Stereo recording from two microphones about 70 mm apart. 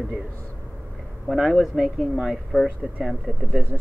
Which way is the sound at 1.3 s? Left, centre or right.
Centre.